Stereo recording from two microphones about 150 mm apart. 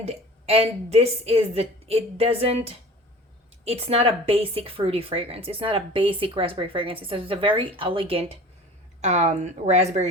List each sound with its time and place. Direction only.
0.0 s a woman's voice: 45° right (ahead or behind)